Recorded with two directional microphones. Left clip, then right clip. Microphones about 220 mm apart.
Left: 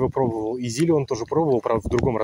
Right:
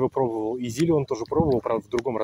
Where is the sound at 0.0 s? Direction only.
5° left (ahead or behind).